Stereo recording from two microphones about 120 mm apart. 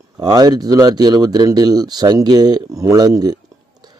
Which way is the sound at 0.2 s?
35° right (ahead or behind).